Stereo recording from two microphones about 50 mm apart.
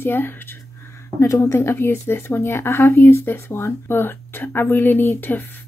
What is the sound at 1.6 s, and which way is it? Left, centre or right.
Speech, left.